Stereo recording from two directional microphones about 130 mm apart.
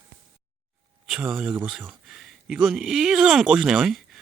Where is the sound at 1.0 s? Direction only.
5° right (ahead or behind).